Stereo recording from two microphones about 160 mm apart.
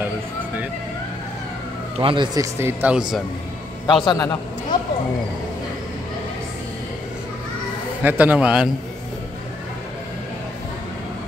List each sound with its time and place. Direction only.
2.0 s speech: 35° right (ahead or behind)
2.3 s speech: 20° right (ahead or behind)
3.8 s a man's voice: 30° left (ahead or behind)
8.0 s speech: 10° right (ahead or behind)